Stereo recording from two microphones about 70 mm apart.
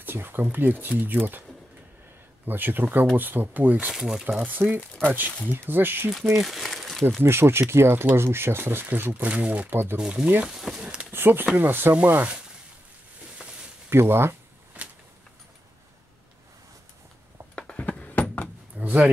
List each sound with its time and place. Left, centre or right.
0.0 s speech: right
2.4 s speech: right
3.9 s speech: centre
4.5 s speech: right
6.3 s speech: centre
7.2 s speech: right
9.9 s speech: centre
11.1 s speech: right
13.8 s a sound: right
17.6 s a sound: centre
18.8 s a sound: right